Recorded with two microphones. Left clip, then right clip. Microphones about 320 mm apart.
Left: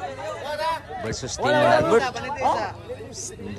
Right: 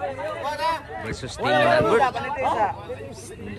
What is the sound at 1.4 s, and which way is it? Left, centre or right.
Speech, left.